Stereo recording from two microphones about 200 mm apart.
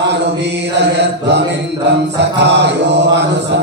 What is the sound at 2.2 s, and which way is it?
Mantra, 55° right (ahead or behind).